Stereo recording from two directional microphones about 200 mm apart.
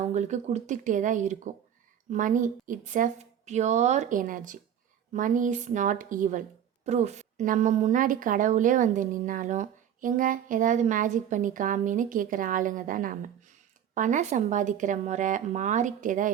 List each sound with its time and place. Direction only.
0.0 s a woman's voice: 35° right (ahead or behind)